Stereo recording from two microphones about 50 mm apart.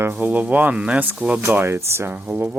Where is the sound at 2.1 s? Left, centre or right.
Right.